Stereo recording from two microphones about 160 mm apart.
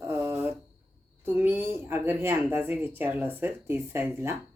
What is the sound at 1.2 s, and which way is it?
Speech, 15° right (ahead or behind).